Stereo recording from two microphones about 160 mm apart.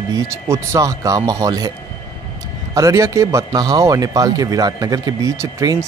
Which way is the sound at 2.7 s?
20° right (ahead or behind).